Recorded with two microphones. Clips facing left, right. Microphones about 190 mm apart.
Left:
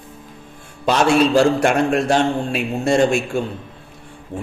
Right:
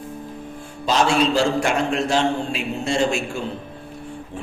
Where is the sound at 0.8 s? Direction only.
55° left (ahead or behind).